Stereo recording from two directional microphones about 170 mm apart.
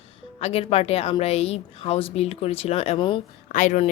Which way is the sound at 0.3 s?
35° left (ahead or behind).